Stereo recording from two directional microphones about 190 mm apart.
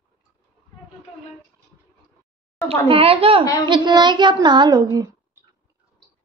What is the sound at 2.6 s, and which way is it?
Child singing, 30° right (ahead or behind).